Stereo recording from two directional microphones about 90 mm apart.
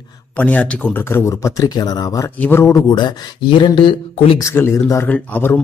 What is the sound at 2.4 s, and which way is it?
Speech, 25° left (ahead or behind).